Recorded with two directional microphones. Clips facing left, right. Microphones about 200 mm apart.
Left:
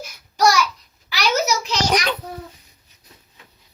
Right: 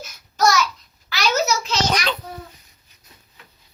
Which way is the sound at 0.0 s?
15° left (ahead or behind).